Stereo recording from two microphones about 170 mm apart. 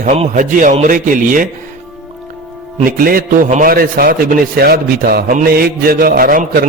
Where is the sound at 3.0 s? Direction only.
55° right (ahead or behind).